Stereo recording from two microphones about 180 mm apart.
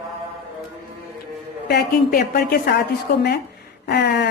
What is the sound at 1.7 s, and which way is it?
A woman's voice, 60° left (ahead or behind).